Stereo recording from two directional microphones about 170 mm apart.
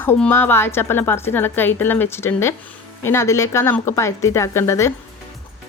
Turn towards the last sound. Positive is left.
turn(degrees=15)  # may be behind; listen again after turning